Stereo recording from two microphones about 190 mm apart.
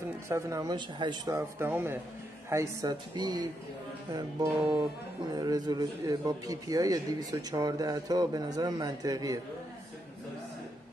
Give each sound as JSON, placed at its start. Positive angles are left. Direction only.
{"t": 0.3, "sound": "a man's voice", "side_deg": -15}